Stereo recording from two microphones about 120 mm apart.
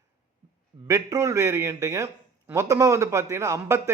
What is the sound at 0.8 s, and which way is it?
A man's voice, 25° right (ahead or behind).